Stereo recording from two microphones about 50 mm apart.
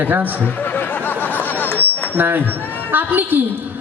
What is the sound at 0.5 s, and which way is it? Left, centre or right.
Music, left.